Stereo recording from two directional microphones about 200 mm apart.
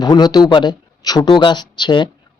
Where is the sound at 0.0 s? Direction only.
20° left (ahead or behind).